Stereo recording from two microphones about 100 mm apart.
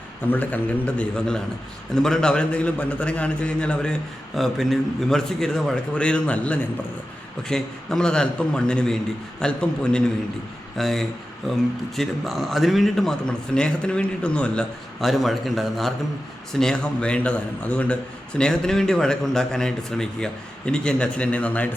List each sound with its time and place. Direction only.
0.3 s a man's voice: 20° left (ahead or behind)
4.4 s a man's voice: centre (ahead or behind)